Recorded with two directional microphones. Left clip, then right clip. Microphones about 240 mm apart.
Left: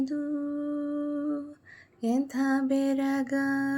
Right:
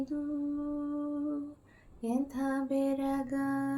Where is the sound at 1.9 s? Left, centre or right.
Left.